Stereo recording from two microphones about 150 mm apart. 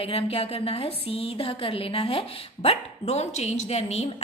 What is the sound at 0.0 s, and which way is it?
A woman's voice, 40° left (ahead or behind).